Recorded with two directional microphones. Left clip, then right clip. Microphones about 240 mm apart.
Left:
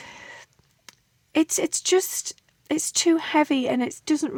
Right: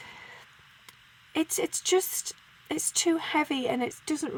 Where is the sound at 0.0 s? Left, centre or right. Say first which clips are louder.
Left 4 dB; left.